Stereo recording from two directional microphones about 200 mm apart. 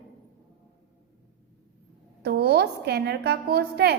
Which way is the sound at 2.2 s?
55° right (ahead or behind).